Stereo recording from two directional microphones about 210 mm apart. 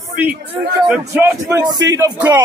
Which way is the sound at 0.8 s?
5° right (ahead or behind).